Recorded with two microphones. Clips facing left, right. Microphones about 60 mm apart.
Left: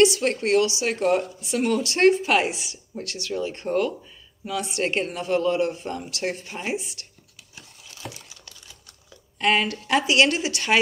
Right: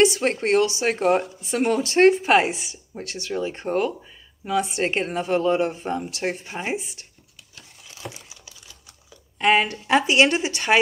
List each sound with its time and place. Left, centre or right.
0.0 s speech: right
8.0 s crumpling: right
9.4 s speech: right